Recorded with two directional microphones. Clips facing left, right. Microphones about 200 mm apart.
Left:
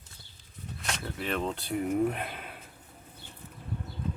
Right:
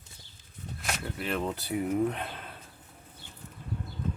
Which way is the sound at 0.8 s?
5° right (ahead or behind).